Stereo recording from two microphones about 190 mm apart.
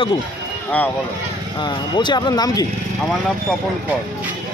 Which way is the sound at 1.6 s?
25° left (ahead or behind).